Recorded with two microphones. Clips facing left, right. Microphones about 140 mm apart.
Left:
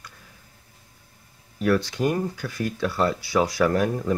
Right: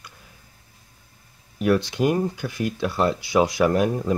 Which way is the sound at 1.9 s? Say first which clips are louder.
Right 3 dB; 15° right (ahead or behind).